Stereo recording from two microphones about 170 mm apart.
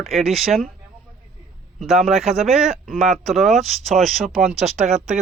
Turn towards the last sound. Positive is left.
turn(degrees=-40)  # may be behind; listen again after turning